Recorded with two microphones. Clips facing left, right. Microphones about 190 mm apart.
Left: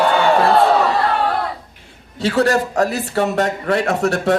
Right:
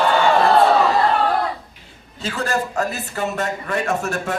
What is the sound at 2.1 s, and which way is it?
A man's voice, 75° left (ahead or behind).